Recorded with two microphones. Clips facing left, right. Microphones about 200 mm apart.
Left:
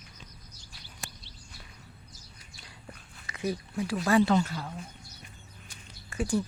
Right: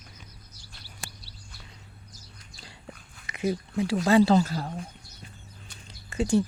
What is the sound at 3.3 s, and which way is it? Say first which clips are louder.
Speech: right 4 dB; 20° right (ahead or behind).